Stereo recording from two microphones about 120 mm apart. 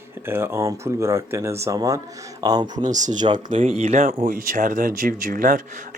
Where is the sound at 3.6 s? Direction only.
70° right (ahead or behind).